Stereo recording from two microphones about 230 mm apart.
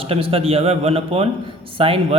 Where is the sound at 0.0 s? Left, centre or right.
Right.